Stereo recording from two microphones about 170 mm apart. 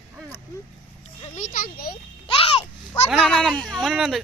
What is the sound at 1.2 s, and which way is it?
Speech, 45° left (ahead or behind).